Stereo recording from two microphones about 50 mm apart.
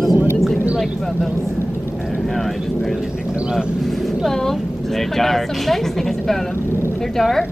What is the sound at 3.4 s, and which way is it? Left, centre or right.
Speech, centre.